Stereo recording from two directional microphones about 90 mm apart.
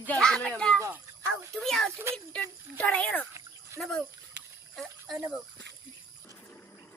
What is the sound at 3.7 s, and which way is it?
Speech, 35° right (ahead or behind).